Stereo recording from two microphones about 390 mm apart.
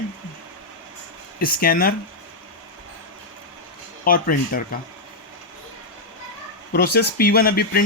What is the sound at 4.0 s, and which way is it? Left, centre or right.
Speech, left.